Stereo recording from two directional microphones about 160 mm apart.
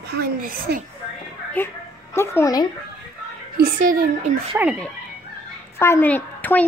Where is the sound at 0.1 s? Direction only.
70° right (ahead or behind).